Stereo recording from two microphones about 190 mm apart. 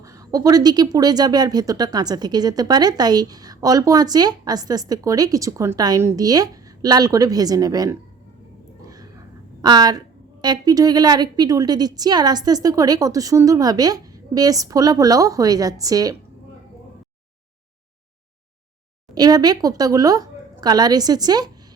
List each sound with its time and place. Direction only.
0.0 s speech: 15° right (ahead or behind)
8.8 s a sound: 20° right (ahead or behind)
10.4 s speech: 20° right (ahead or behind)
19.1 s speech: 20° right (ahead or behind)